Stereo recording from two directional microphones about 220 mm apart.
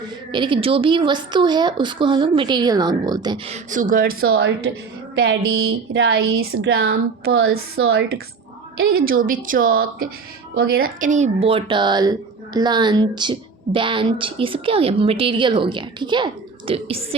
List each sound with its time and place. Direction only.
0.3 s a woman's voice: 20° right (ahead or behind); by 4.4 s 45° right (ahead or behind)
5.2 s speech: 65° right (ahead or behind)
6.5 s speech: 50° right (ahead or behind)
7.3 s a sound: 70° right (ahead or behind)
9.0 s a woman's voice: 40° right (ahead or behind)